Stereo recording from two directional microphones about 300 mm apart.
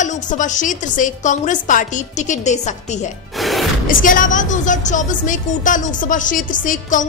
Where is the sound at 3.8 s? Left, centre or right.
Left.